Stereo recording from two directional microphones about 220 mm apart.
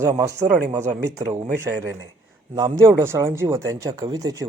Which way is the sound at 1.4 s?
10° right (ahead or behind).